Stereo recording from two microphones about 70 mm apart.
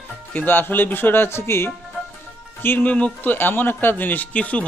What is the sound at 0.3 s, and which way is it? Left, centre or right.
Speech, left.